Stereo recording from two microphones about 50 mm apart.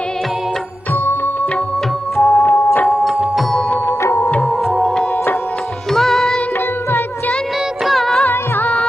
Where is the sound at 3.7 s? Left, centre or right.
Left.